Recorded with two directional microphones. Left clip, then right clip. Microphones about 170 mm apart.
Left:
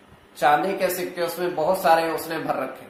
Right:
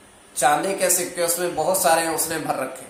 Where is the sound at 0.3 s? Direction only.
Centre (ahead or behind).